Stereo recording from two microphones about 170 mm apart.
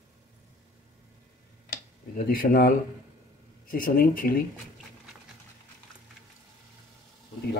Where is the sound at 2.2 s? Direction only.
55° left (ahead or behind).